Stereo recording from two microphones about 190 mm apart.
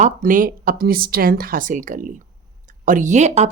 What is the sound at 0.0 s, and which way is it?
A woman's voice, 45° right (ahead or behind).